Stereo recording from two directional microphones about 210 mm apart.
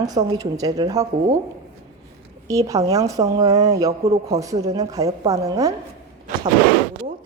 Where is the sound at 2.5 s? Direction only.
15° right (ahead or behind).